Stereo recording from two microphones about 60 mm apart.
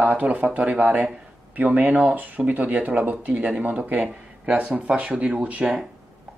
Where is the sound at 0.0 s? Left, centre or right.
Right.